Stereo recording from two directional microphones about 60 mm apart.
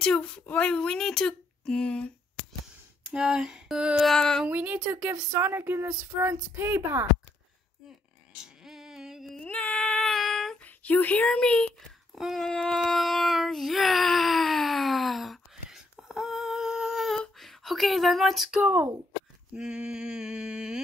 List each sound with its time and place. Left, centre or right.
0.0 s speech: centre
3.2 s mantra: centre
4.5 s a woman's voice: right
5.4 s speech: right
8.6 s female singing: centre
9.5 s a sound: left
10.1 s child singing: centre
10.6 s a sound: left
11.2 s speech: centre
12.4 s child singing: centre
17.4 s speech: centre
18.6 s a woman's voice: right
19.5 s mantra: centre